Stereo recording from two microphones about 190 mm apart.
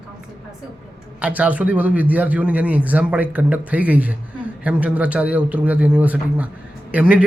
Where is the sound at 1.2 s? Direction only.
5° right (ahead or behind).